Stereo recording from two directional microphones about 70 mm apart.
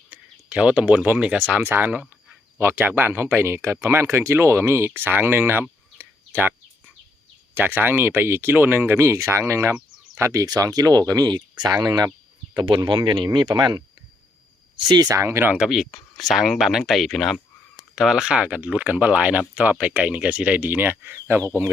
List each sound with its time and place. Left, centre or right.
0.1 s speech: centre
6.0 s a sound: right
7.5 s speech: right
9.0 s speech: right
10.4 s speech: right
12.9 s speech: right
13.6 s speech: right
15.1 s speech: right
15.5 s speech: centre; by 21.4 s right